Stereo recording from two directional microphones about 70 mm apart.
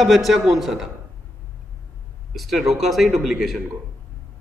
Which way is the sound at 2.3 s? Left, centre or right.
Centre.